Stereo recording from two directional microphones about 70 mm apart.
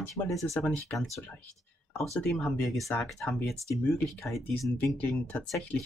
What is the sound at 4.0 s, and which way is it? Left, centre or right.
Speech, centre.